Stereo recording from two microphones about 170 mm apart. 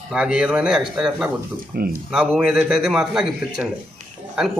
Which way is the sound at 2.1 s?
5° right (ahead or behind).